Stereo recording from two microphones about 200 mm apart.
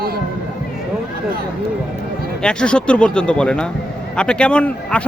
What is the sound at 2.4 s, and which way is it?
Speech, 5° left (ahead or behind).